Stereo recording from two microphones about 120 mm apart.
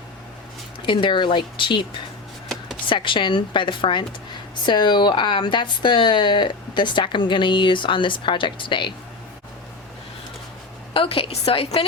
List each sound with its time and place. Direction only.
0.9 s a woman's voice: 40° left (ahead or behind)
2.9 s a woman's voice: 45° left (ahead or behind)
10.9 s a woman's voice: 50° left (ahead or behind)